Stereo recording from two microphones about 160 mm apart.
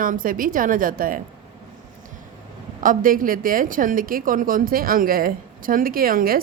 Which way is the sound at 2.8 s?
60° right (ahead or behind).